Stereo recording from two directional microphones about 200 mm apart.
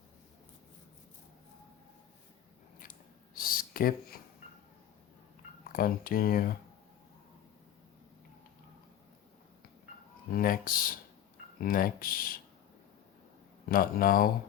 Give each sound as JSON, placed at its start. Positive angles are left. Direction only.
{"t": 3.3, "sound": "a sound", "side_deg": 45}
{"t": 5.6, "sound": "speech", "side_deg": 45}
{"t": 10.3, "sound": "speech", "side_deg": 45}
{"t": 13.7, "sound": "speech", "side_deg": 45}